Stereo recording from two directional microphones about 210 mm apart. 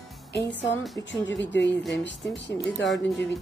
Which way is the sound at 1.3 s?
55° left (ahead or behind).